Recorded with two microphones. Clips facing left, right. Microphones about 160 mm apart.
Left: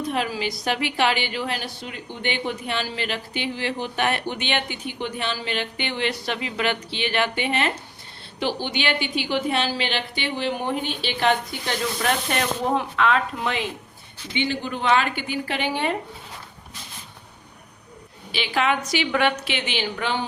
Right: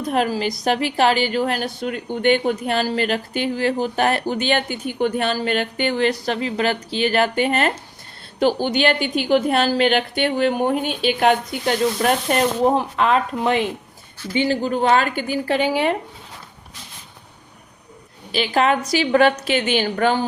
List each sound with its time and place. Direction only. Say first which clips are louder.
0.1 s a woman's voice: right 5 dB; 45° right (ahead or behind)
18.3 s a woman's voice: right 5 dB; 40° right (ahead or behind)